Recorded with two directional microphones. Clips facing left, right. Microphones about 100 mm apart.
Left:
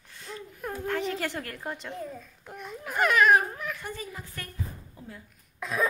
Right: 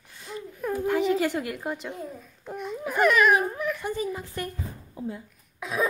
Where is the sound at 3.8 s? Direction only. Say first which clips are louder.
Right 9 dB; 20° right (ahead or behind).